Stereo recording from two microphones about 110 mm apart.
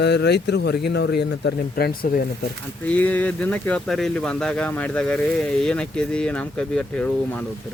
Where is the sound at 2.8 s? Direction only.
15° left (ahead or behind).